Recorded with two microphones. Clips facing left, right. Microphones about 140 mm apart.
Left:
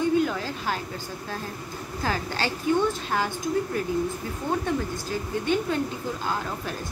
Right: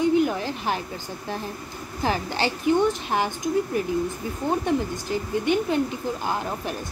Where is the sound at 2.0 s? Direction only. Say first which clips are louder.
Right 3 dB; 20° right (ahead or behind).